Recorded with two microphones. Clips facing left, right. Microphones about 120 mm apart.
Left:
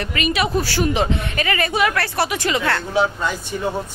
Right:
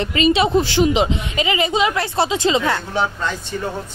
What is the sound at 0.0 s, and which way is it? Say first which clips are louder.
Speech: right 5 dB; 25° right (ahead or behind).